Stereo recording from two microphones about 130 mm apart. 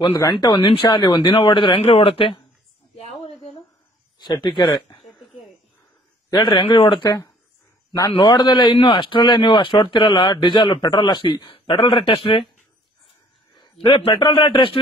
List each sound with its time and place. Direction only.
0.1 s speech: 25° left (ahead or behind); by 2.4 s 45° left (ahead or behind)
3.0 s a sound: 55° left (ahead or behind)
4.2 s speech: 35° left (ahead or behind)
6.3 s speech: 40° left (ahead or behind)
13.8 s speech: 40° left (ahead or behind)